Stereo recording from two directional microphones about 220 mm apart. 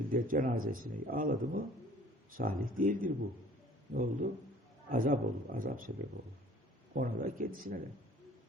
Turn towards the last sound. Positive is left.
turn(degrees=-40)  # may be behind; listen again after turning